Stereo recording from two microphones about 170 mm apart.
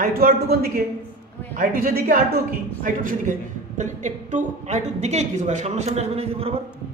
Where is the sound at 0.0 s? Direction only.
55° right (ahead or behind); by 6.6 s 35° right (ahead or behind).